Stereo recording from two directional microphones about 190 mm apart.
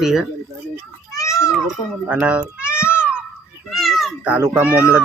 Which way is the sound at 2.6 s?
15° left (ahead or behind).